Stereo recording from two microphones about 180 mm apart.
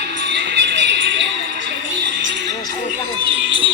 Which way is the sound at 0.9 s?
75° right (ahead or behind).